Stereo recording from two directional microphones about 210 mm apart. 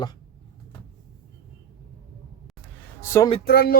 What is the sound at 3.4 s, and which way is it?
Music, 45° left (ahead or behind).